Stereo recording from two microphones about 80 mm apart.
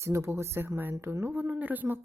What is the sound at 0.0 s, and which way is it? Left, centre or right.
Speech, right.